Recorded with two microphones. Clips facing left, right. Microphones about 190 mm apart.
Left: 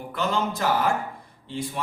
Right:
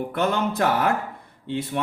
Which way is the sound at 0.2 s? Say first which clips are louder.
Right 3 dB; 60° right (ahead or behind).